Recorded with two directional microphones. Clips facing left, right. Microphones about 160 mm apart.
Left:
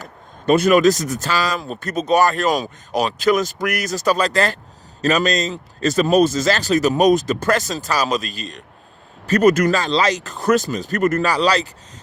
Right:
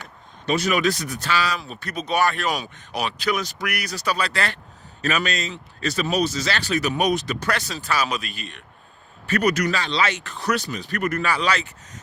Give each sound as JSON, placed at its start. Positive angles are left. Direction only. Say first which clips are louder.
{"t": 0.4, "sound": "speech", "louder": "left 8 dB", "side_deg": 50}